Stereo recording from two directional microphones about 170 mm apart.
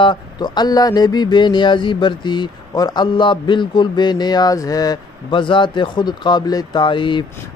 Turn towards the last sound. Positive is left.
turn(degrees=30)  # may be behind; listen again after turning